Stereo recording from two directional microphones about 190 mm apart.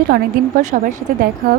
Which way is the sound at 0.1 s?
45° right (ahead or behind).